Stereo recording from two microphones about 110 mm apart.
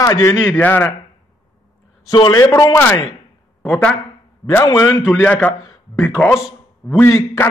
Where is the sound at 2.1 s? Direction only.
45° left (ahead or behind).